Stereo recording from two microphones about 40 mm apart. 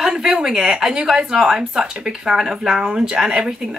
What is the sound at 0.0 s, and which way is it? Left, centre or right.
A woman's voice, centre.